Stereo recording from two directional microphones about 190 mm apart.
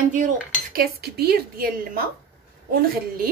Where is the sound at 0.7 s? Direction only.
55° right (ahead or behind).